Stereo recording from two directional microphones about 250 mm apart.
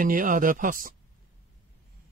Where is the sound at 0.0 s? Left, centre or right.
Right.